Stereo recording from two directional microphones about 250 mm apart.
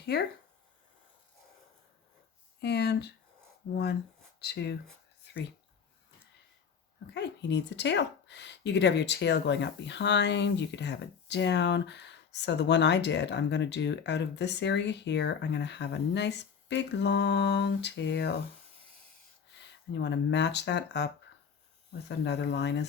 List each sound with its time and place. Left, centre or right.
0.0 s speech: left
2.6 s speech: left
7.1 s speech: left
19.9 s speech: left